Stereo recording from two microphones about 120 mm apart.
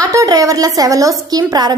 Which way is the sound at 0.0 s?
30° right (ahead or behind).